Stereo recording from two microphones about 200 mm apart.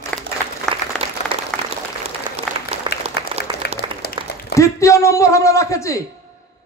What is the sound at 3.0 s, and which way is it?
Applause, 30° right (ahead or behind).